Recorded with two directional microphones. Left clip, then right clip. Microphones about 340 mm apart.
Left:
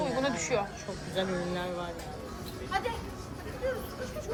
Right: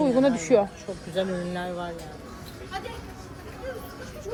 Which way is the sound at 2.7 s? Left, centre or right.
Centre.